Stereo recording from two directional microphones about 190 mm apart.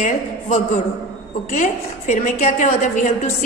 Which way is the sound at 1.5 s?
40° left (ahead or behind).